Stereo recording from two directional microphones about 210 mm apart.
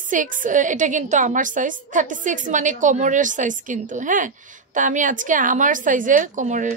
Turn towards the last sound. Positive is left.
turn(degrees=-35)  # may be behind; listen again after turning